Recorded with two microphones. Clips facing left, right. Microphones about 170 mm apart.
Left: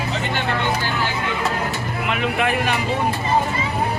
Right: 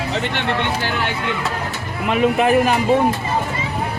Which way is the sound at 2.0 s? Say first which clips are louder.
Right 7 dB; 35° right (ahead or behind).